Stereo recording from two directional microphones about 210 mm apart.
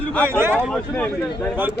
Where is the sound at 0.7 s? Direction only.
5° left (ahead or behind).